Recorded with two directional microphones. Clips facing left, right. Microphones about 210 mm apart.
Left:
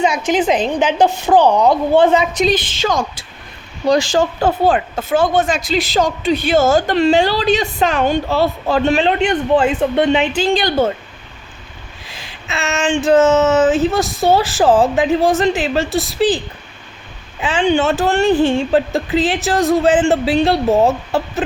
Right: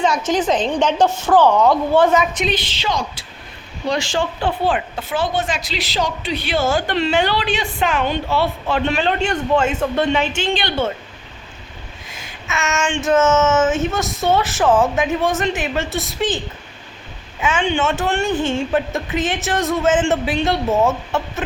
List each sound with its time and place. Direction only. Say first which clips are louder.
0.4 s a woman's voice: left 2 dB; 10° left (ahead or behind)
2.1 s speech: left 3 dB; 40° left (ahead or behind)
9.0 s a man's voice: left 4 dB; 25° left (ahead or behind)
10.3 s speech: left 5 dB; 40° left (ahead or behind)
12.5 s speech: left 3 dB; 30° left (ahead or behind)
17.4 s speech: left 4 dB; 35° left (ahead or behind)